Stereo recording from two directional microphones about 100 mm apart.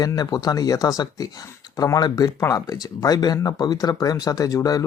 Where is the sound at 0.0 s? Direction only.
35° left (ahead or behind).